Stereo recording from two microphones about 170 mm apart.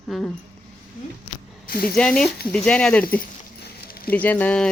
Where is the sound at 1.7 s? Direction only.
60° left (ahead or behind).